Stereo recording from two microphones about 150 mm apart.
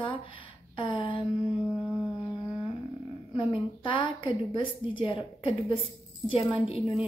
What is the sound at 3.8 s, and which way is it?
A woman's voice, 35° left (ahead or behind).